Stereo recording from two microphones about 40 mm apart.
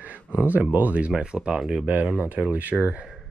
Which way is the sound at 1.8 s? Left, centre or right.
Right.